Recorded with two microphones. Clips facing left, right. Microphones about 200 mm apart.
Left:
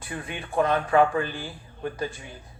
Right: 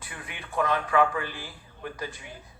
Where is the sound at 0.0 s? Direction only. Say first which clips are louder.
Left 8 dB; 25° left (ahead or behind).